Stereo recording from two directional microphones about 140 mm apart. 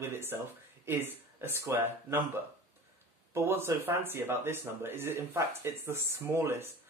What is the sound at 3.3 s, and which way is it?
Speech, 15° right (ahead or behind).